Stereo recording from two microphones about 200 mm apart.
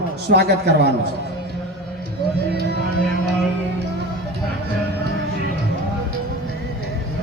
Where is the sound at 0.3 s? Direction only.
55° right (ahead or behind).